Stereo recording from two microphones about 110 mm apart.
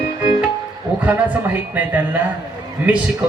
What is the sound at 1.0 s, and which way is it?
A man's voice, 15° right (ahead or behind).